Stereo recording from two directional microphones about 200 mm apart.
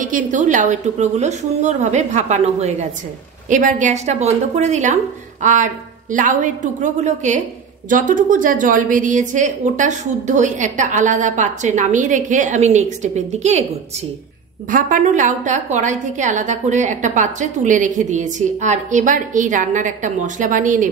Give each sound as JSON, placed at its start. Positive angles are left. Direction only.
{"t": 0.0, "sound": "a woman's voice", "side_deg": -40}
{"t": 14.7, "sound": "a woman's voice", "side_deg": -40}